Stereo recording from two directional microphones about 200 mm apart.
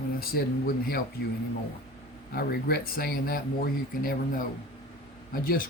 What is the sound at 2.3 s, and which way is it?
Speech, 50° left (ahead or behind).